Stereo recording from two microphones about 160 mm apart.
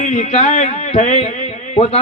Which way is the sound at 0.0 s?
45° left (ahead or behind).